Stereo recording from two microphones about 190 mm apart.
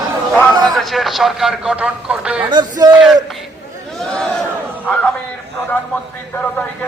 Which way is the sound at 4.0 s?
Centre (ahead or behind).